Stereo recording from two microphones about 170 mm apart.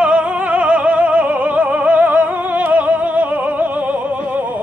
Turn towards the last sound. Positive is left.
turn(degrees=-10)  # may be behind; listen again after turning